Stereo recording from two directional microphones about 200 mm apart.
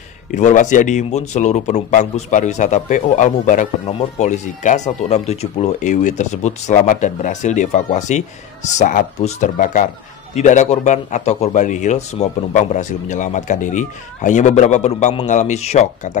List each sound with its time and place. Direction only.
0.3 s a man's voice: 40° left (ahead or behind)